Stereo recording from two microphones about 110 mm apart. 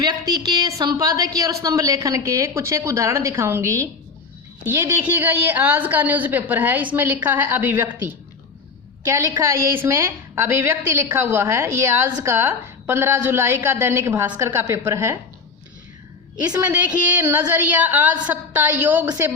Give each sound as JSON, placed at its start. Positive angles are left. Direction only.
{"t": 0.0, "sound": "a woman's voice", "side_deg": -35}
{"t": 16.6, "sound": "a woman's voice", "side_deg": -15}